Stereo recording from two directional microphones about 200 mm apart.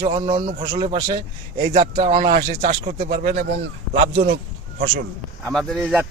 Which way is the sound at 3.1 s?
50° right (ahead or behind).